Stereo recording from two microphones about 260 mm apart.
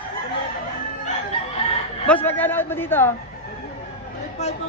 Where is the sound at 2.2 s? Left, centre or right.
Centre.